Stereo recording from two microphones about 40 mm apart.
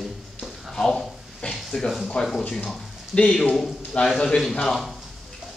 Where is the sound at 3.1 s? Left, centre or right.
Centre.